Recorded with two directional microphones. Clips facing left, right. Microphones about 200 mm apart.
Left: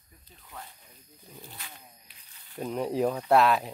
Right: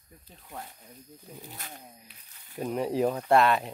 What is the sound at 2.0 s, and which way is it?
Speech, 5° right (ahead or behind).